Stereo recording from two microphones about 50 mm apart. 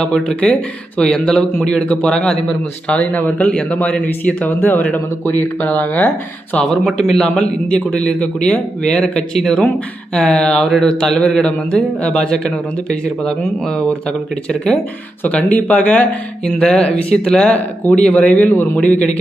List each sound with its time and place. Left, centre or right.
0.0 s a man's voice: centre; by 6.1 s left
6.9 s a man's voice: centre
15.3 s speech: left
16.5 s a man's voice: centre; by 18.7 s left
18.8 s a man's voice: left